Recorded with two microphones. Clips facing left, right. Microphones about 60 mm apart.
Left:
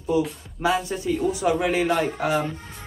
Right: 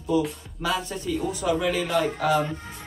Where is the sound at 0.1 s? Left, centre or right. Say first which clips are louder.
Even; left.